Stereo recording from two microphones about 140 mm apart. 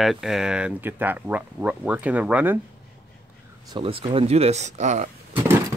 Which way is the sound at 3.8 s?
40° right (ahead or behind).